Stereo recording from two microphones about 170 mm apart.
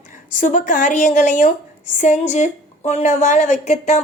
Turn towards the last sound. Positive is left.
turn(degrees=40)  # may be behind; listen again after turning